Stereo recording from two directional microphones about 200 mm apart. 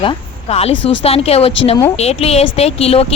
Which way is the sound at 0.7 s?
65° left (ahead or behind).